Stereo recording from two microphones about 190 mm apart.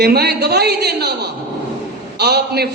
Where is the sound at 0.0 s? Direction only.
55° right (ahead or behind).